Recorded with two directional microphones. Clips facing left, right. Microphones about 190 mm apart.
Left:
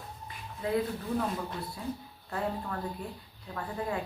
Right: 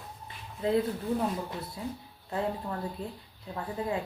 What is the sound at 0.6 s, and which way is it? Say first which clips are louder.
Speech: right 3 dB; 25° right (ahead or behind).